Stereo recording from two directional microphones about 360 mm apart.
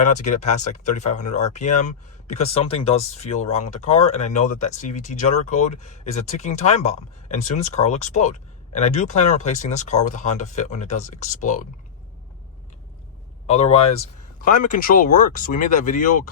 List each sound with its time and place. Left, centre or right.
0.0 s speech: centre
13.5 s speech: centre